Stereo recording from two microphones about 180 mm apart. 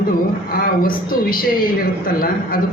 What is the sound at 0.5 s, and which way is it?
A woman's voice, 55° left (ahead or behind).